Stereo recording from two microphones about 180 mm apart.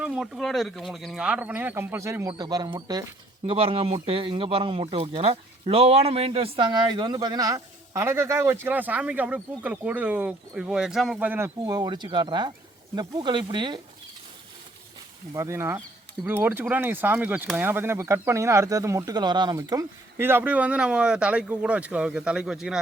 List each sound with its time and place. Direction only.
0.0 s a man's voice: 5° right (ahead or behind); by 13.8 s 25° right (ahead or behind)
15.3 s speech: 15° right (ahead or behind)